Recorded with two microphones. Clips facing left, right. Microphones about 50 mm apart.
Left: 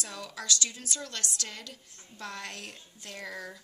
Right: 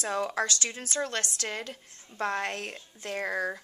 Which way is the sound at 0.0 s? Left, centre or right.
Right.